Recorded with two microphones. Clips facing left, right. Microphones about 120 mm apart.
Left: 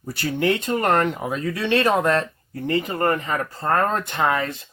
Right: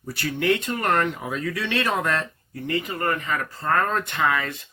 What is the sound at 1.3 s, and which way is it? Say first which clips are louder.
Speech: left 5 dB; 30° left (ahead or behind).